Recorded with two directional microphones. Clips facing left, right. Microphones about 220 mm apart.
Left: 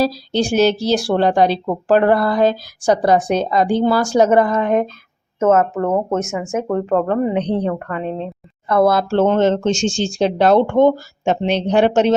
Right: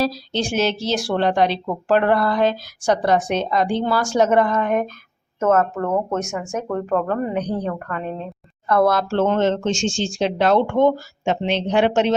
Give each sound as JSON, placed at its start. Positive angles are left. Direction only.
{"t": 0.0, "sound": "a woman's voice", "side_deg": 35}
{"t": 6.2, "sound": "speech", "side_deg": 5}
{"t": 6.6, "sound": "a woman's voice", "side_deg": 20}